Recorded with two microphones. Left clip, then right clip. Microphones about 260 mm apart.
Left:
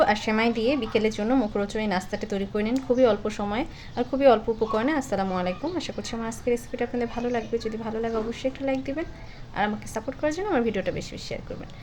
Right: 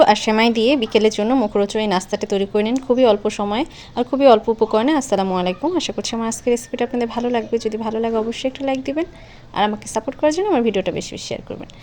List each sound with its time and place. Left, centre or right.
0.0 s a woman's voice: right